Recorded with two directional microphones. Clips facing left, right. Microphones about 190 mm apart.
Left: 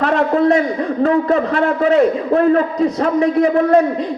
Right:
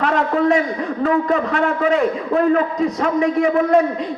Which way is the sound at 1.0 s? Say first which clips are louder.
Left 3 dB; 35° left (ahead or behind).